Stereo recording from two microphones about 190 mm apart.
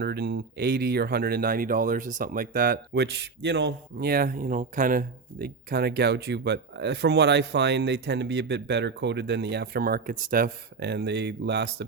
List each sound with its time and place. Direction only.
0.0 s speech: 55° right (ahead or behind)